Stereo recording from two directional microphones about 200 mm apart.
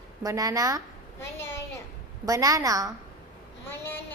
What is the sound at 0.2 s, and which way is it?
Speech, 15° right (ahead or behind).